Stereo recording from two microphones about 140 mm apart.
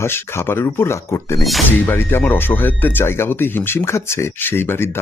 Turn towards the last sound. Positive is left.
turn(degrees=15)  # may be behind; listen again after turning